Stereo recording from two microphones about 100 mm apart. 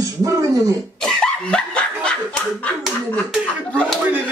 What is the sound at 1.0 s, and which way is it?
Dog, 10° left (ahead or behind).